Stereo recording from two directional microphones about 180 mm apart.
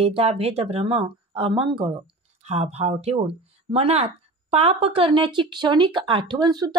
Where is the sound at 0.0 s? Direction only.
35° right (ahead or behind).